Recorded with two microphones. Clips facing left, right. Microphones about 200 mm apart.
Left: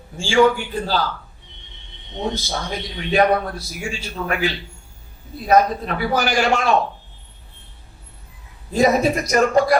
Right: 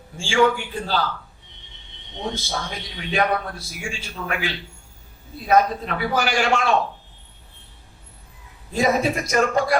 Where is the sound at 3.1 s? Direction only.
40° left (ahead or behind).